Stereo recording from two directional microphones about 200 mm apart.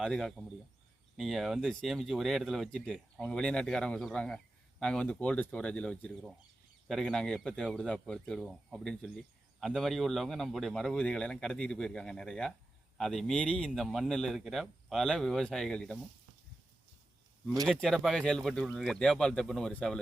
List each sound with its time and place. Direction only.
0.0 s a man's voice: centre (ahead or behind)
17.7 s a man's voice: centre (ahead or behind)